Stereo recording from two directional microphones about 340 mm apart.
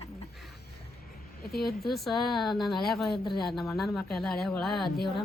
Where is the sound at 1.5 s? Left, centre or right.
Left.